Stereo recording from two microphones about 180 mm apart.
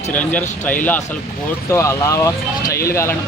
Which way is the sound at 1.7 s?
15° left (ahead or behind).